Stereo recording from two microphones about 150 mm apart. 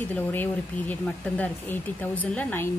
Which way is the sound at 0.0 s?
15° left (ahead or behind).